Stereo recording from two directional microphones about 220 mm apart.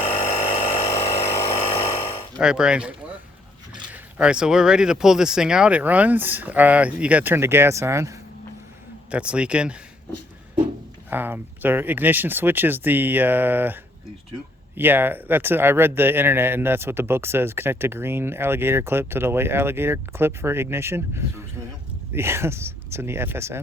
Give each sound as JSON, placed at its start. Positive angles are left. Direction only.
{"t": 0.0, "sound": "a sound", "side_deg": 30}
{"t": 2.3, "sound": "speech", "side_deg": -5}
{"t": 3.9, "sound": "speech", "side_deg": -5}
{"t": 11.1, "sound": "speech", "side_deg": -10}
{"t": 14.8, "sound": "speech", "side_deg": -10}